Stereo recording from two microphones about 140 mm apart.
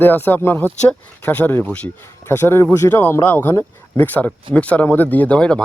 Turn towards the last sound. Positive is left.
turn(degrees=5)  # may be behind; listen again after turning